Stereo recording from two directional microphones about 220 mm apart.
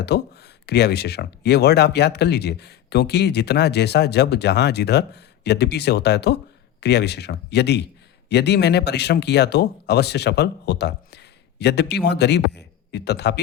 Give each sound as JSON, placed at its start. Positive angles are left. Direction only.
{"t": 0.0, "sound": "speech", "side_deg": 50}